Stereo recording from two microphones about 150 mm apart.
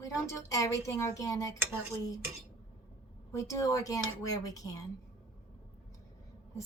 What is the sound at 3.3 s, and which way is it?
Speech, 20° left (ahead or behind).